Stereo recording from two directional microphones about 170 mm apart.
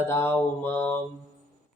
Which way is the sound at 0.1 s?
15° left (ahead or behind).